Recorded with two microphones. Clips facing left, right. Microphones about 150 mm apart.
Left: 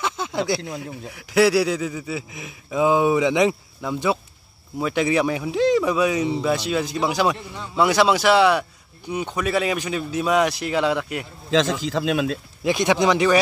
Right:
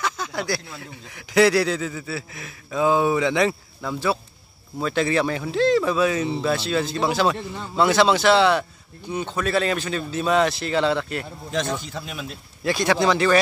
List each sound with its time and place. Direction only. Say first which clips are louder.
0.0 s a sound: left 3 dB; 25° left (ahead or behind)
1.1 s speech: even; 5° left (ahead or behind)
11.5 s speech: left 6 dB; 90° left
12.6 s speech: left 1 dB; 15° left (ahead or behind)